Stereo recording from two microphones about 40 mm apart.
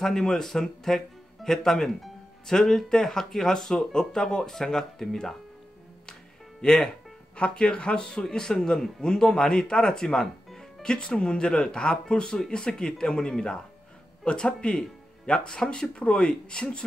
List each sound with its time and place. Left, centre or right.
0.0 s speech: centre
6.6 s speech: centre
7.3 s a man's voice: left